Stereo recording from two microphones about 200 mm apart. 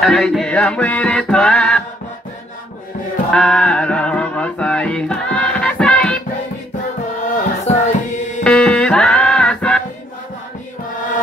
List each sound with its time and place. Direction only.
0.0 s music: centre (ahead or behind)
3.3 s music: 5° left (ahead or behind)
7.3 s music: 35° left (ahead or behind)
8.5 s music: 5° left (ahead or behind)